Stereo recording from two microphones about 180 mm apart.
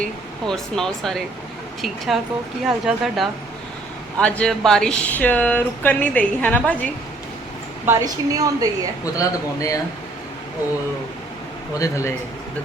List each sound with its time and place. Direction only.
0.0 s speech: 5° left (ahead or behind)
7.9 s a woman's voice: 20° right (ahead or behind)
9.1 s speech: 20° left (ahead or behind)
11.7 s speech: 20° left (ahead or behind)